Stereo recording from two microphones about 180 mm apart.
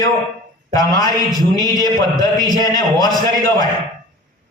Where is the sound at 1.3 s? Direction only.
20° right (ahead or behind).